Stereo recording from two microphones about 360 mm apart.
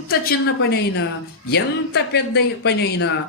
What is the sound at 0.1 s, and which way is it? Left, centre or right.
Speech, left.